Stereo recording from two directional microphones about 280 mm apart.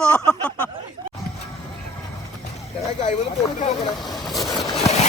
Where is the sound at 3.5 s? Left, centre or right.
Centre.